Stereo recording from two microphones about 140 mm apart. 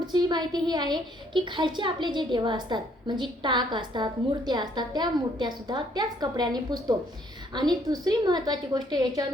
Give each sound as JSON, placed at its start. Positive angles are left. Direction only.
{"t": 0.1, "sound": "a woman's voice", "side_deg": -30}